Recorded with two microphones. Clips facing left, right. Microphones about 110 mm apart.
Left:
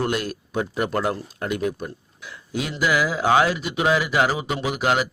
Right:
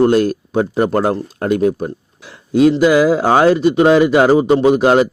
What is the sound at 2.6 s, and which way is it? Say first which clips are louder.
Speech: right 12 dB; 30° right (ahead or behind).